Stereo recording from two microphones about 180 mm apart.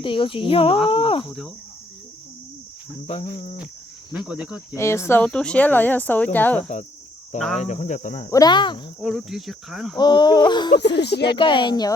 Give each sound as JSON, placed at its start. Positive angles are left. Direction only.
{"t": 0.0, "sound": "speech", "side_deg": 30}
{"t": 3.3, "sound": "speech", "side_deg": 35}
{"t": 4.1, "sound": "speech", "side_deg": -5}
{"t": 4.7, "sound": "speech", "side_deg": 15}
{"t": 7.6, "sound": "speech", "side_deg": 40}
{"t": 8.3, "sound": "speech", "side_deg": 20}
{"t": 9.0, "sound": "speech", "side_deg": 0}
{"t": 10.0, "sound": "speech", "side_deg": 25}
{"t": 10.8, "sound": "speech", "side_deg": 65}
{"t": 11.3, "sound": "speech", "side_deg": 25}